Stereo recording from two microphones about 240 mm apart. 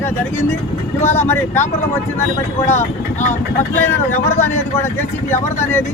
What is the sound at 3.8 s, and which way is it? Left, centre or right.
Speech, centre.